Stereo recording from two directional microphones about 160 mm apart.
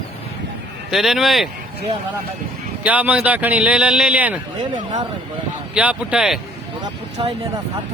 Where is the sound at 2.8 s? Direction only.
10° right (ahead or behind).